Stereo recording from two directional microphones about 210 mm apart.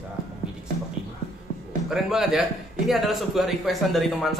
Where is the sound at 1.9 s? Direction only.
Centre (ahead or behind).